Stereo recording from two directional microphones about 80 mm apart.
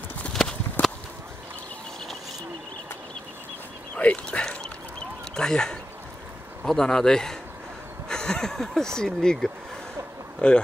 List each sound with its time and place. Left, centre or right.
0.3 s clip-clop: centre
0.8 s a sound: left
3.9 s speech: centre